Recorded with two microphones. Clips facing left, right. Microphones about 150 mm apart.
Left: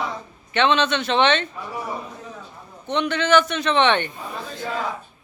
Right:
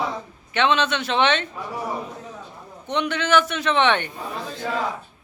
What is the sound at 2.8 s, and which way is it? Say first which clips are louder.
Speech: left 2 dB; 10° right (ahead or behind).